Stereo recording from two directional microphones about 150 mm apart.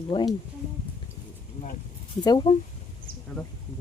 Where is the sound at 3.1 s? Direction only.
80° right.